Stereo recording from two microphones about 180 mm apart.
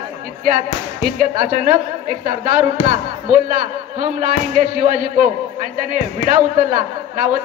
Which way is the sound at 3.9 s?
45° right (ahead or behind).